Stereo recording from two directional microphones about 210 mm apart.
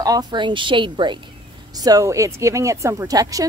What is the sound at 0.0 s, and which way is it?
A woman's voice, 20° right (ahead or behind).